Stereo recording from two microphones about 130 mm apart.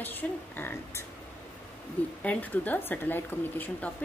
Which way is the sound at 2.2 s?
10° left (ahead or behind).